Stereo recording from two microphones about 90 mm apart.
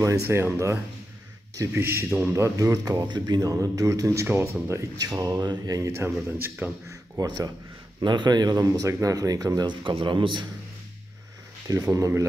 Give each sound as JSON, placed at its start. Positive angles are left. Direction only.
{"t": 0.0, "sound": "speech", "side_deg": -35}
{"t": 3.1, "sound": "speech", "side_deg": -50}
{"t": 4.9, "sound": "speech", "side_deg": -45}
{"t": 5.9, "sound": "speech", "side_deg": -25}
{"t": 7.2, "sound": "speech", "side_deg": -45}
{"t": 8.0, "sound": "speech", "side_deg": -55}
{"t": 11.6, "sound": "speech", "side_deg": -40}